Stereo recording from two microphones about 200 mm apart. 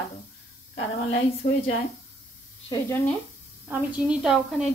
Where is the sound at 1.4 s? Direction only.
40° left (ahead or behind).